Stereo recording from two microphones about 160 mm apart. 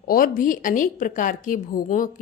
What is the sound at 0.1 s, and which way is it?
Speech, 60° left (ahead or behind).